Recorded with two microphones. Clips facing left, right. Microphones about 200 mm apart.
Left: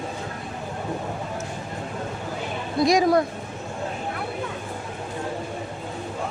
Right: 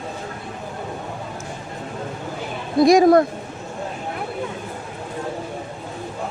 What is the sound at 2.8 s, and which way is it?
Speech, 50° right (ahead or behind).